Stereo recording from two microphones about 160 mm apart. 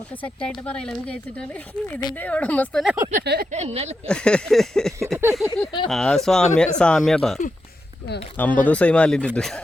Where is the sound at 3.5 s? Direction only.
40° right (ahead or behind).